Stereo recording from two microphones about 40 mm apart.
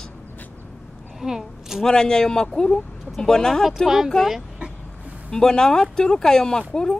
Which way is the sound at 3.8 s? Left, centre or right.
Centre.